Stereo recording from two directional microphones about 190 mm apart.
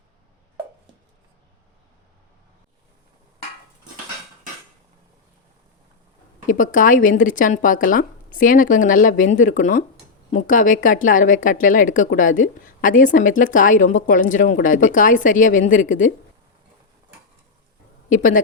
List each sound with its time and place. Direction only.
6.5 s speech: 45° left (ahead or behind)
18.1 s speech: 45° left (ahead or behind)